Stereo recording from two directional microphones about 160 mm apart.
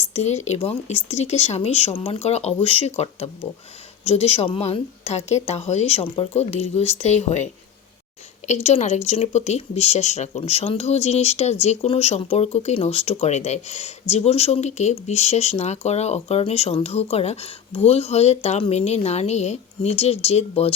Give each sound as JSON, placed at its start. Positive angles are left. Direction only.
{"t": 0.1, "sound": "speech", "side_deg": 45}
{"t": 4.0, "sound": "speech", "side_deg": 40}
{"t": 8.4, "sound": "speech", "side_deg": 45}